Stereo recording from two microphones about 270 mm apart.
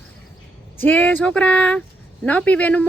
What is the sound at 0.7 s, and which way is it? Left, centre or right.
Speech, centre.